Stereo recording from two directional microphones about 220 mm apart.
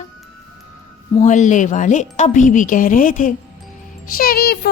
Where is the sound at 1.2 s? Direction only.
35° left (ahead or behind).